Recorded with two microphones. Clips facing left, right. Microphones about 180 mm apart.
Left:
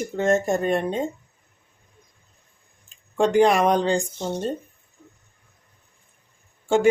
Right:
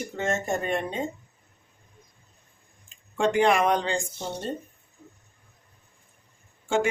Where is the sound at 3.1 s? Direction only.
35° left (ahead or behind).